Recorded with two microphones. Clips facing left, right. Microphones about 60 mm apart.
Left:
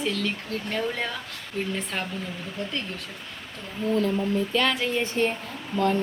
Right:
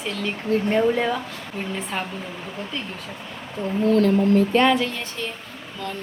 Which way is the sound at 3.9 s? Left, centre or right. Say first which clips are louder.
Right 6 dB; right.